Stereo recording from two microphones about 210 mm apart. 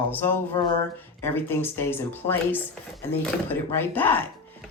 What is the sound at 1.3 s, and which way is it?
Speech, 10° left (ahead or behind).